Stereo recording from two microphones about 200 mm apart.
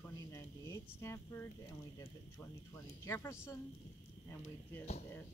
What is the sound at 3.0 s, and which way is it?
Speech, 15° left (ahead or behind).